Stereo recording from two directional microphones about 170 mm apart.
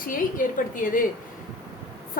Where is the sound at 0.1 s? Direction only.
55° left (ahead or behind).